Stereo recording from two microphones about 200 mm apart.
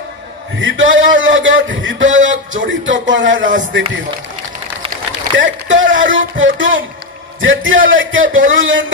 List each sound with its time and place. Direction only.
0.6 s a man's voice: 70° right (ahead or behind)
5.4 s a man's voice: 70° right (ahead or behind)